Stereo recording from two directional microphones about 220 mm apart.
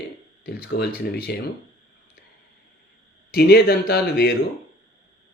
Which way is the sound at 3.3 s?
45° left (ahead or behind).